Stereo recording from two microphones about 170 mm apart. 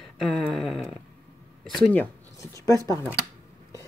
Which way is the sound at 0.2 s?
Centre (ahead or behind).